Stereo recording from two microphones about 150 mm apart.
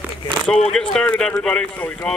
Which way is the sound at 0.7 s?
5° left (ahead or behind).